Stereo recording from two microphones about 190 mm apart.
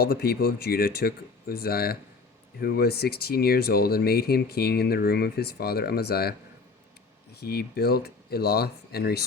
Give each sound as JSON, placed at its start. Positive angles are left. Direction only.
{"t": 0.0, "sound": "speech", "side_deg": 55}
{"t": 7.3, "sound": "speech", "side_deg": 55}